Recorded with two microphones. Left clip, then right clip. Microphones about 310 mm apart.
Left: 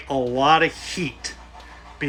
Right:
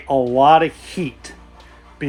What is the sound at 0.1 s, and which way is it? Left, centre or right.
Speech, centre.